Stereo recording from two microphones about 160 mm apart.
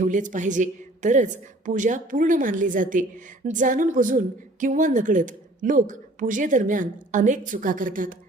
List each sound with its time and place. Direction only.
0.0 s a woman's voice: 55° right (ahead or behind)